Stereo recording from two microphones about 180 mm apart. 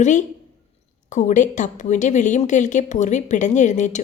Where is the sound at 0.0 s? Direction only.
45° left (ahead or behind).